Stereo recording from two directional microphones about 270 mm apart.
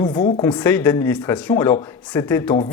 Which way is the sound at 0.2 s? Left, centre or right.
Left.